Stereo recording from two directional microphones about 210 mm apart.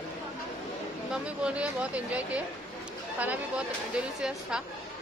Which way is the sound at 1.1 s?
5° right (ahead or behind).